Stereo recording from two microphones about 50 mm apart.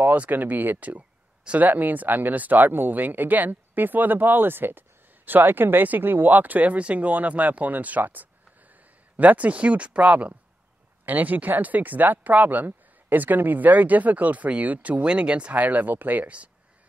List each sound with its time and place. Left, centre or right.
0.0 s speech: right